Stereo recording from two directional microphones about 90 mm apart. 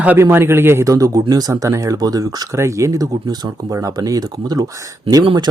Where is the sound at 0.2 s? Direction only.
25° right (ahead or behind); by 2.5 s 45° right (ahead or behind).